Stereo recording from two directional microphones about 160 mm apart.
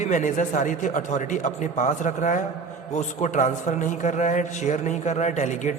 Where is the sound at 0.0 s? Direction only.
50° left (ahead or behind).